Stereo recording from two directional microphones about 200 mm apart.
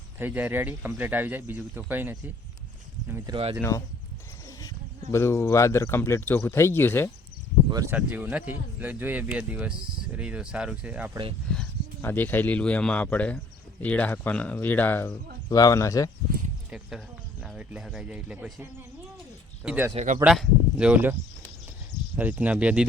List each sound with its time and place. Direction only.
0.2 s speech: 10° right (ahead or behind)
3.6 s speech: 15° left (ahead or behind)
5.1 s speech: 15° left (ahead or behind)
7.7 s speech: 15° right (ahead or behind)
11.5 s speech: 5° left (ahead or behind)
17.4 s speech: 5° right (ahead or behind)
19.6 s speech: 10° right (ahead or behind)
19.9 s speech: 35° right (ahead or behind)
20.2 s speech: centre (ahead or behind)